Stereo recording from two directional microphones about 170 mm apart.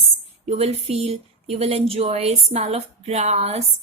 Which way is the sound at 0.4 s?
35° right (ahead or behind).